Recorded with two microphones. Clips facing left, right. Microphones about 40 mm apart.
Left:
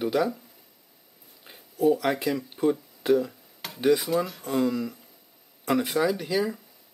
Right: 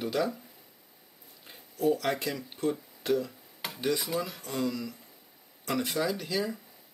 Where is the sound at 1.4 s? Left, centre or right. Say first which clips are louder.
Left 5 dB; centre.